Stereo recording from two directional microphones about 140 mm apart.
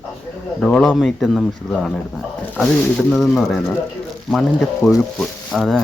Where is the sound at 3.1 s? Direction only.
Centre (ahead or behind).